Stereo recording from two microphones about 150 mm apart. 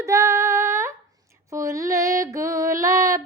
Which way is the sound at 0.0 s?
20° right (ahead or behind).